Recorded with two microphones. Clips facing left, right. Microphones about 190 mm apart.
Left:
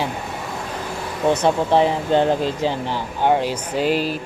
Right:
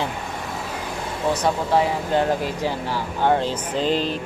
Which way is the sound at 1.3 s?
25° left (ahead or behind).